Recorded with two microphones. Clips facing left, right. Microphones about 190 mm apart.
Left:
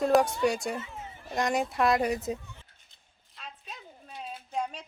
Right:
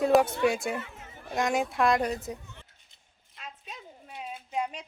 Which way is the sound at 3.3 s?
10° right (ahead or behind).